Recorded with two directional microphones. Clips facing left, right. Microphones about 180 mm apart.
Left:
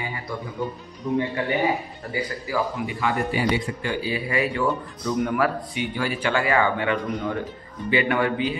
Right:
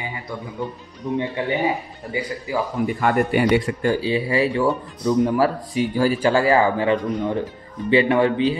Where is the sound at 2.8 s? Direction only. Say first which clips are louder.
Right 5 dB; 55° right (ahead or behind).